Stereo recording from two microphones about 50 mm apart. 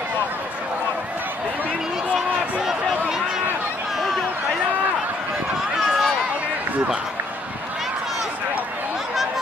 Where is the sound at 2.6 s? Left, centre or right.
Centre.